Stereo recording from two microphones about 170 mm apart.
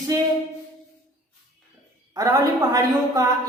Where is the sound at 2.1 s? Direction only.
20° right (ahead or behind).